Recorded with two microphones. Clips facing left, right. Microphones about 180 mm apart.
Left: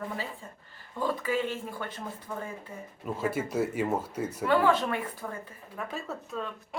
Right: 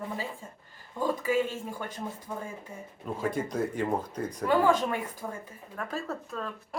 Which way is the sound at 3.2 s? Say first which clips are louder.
Left 1 dB; 5° left (ahead or behind).